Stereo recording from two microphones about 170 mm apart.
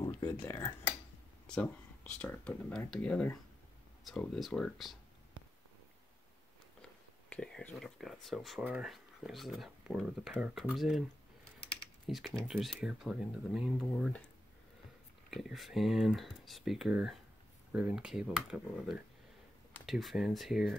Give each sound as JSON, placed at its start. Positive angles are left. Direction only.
{"t": 0.0, "sound": "a sound", "side_deg": 15}
{"t": 1.5, "sound": "speech", "side_deg": 5}
{"t": 7.2, "sound": "speech", "side_deg": 5}
{"t": 12.1, "sound": "speech", "side_deg": 0}
{"t": 15.2, "sound": "speech", "side_deg": 0}